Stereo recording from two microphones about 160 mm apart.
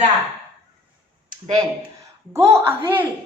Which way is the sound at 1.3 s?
25° right (ahead or behind).